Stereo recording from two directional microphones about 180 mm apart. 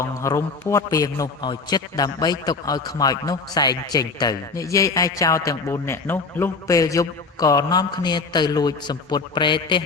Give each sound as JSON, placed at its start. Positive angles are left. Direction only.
{"t": 0.0, "sound": "a man's voice", "side_deg": 15}